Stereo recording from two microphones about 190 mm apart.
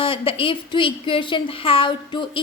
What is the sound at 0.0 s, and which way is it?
Speech, 30° left (ahead or behind).